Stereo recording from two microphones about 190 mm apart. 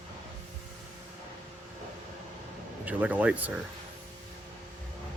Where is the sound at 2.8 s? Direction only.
5° right (ahead or behind).